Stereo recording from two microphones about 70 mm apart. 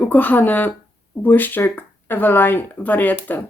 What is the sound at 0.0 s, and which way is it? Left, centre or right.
Speech, left.